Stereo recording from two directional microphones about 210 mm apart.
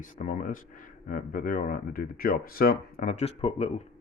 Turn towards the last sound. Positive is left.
turn(degrees=30)  # may be behind; listen again after turning